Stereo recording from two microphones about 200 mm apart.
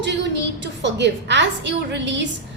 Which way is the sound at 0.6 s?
60° right (ahead or behind).